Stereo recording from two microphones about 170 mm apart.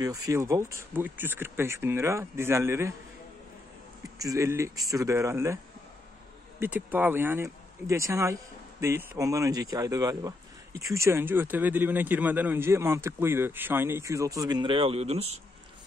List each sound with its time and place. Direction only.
0.0 s speech: 20° right (ahead or behind)
4.2 s speech: 20° right (ahead or behind)
6.6 s speech: 10° right (ahead or behind); by 15.2 s 40° right (ahead or behind)